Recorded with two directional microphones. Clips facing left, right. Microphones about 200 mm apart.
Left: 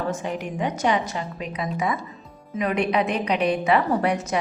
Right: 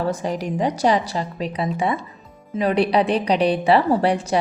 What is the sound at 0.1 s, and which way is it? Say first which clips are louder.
A woman's voice: right 4 dB; 35° right (ahead or behind).